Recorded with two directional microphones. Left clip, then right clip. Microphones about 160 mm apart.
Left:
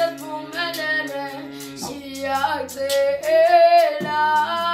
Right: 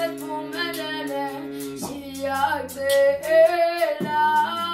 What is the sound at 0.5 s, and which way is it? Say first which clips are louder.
Singing: left 8 dB; centre (ahead or behind).